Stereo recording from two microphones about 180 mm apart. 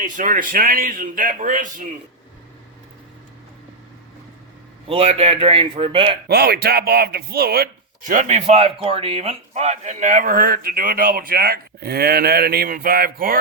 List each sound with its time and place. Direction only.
0.0 s speech: 45° right (ahead or behind)
4.9 s a man's voice: 35° right (ahead or behind)
6.2 s speech: 60° right (ahead or behind)
8.0 s speech: 45° right (ahead or behind)